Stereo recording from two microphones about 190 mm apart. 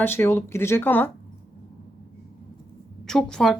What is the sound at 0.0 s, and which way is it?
Speech, 10° left (ahead or behind).